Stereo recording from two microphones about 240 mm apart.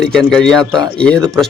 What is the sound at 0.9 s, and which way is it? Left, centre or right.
Speech, centre.